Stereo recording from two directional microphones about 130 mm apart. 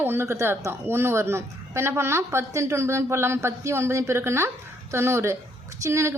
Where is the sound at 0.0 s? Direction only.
15° right (ahead or behind).